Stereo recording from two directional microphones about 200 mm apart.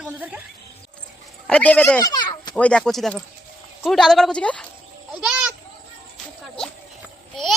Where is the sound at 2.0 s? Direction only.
20° left (ahead or behind).